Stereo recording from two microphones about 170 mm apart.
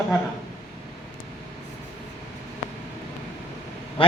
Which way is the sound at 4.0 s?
30° left (ahead or behind).